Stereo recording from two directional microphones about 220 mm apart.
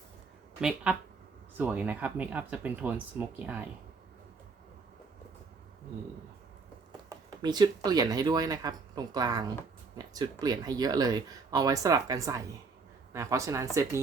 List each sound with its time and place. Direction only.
0.6 s speech: 5° right (ahead or behind)
6.9 s speech: 20° right (ahead or behind)